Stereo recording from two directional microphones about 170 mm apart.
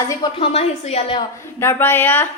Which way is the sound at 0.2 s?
35° left (ahead or behind).